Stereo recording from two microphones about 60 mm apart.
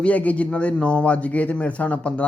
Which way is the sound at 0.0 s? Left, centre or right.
Left.